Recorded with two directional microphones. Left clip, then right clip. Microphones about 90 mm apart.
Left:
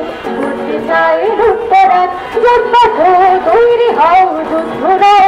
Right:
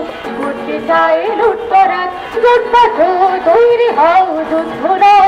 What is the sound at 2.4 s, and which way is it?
A man's voice, 35° right (ahead or behind).